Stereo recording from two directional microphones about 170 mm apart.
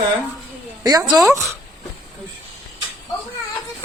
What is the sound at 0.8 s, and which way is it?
Speech, 25° right (ahead or behind).